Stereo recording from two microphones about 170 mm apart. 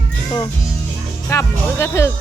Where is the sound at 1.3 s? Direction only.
15° left (ahead or behind).